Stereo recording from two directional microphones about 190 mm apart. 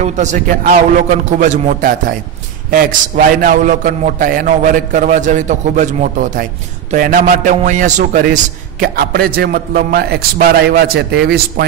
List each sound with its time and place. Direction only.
0.0 s a man's voice: 40° right (ahead or behind); by 11.6 s 55° right (ahead or behind)